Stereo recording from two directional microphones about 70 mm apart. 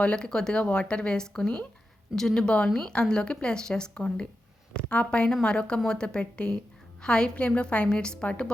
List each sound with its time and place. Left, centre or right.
0.0 s speech: centre